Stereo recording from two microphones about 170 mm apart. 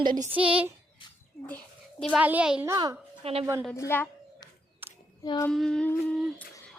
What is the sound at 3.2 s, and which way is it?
Speech, 35° right (ahead or behind).